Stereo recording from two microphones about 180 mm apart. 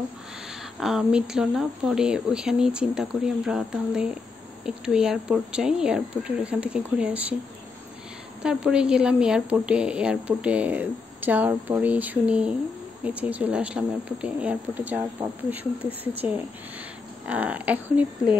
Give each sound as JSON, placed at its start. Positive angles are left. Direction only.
{"t": 0.7, "sound": "speech", "side_deg": -5}
{"t": 8.4, "sound": "a woman's voice", "side_deg": -5}